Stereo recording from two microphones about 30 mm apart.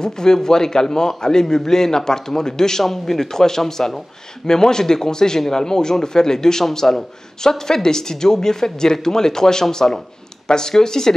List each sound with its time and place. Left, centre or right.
0.0 s speech: left